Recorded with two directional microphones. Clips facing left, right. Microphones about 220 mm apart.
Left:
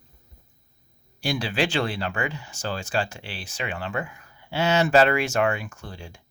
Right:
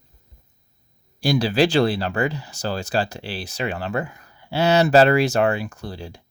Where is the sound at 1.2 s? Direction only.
40° right (ahead or behind).